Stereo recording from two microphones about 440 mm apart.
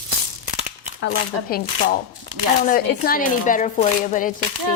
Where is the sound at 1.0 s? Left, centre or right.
Centre.